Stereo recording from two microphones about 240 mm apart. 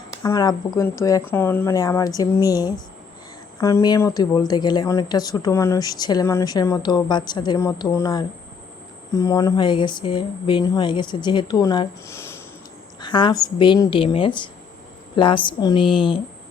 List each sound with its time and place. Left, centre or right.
0.1 s speech: centre